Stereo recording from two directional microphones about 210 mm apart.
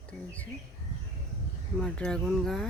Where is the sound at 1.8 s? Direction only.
5° left (ahead or behind).